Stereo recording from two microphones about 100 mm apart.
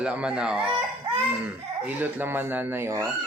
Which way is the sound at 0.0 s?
10° right (ahead or behind).